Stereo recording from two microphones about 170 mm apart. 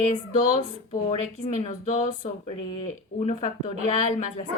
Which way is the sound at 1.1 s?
45° left (ahead or behind).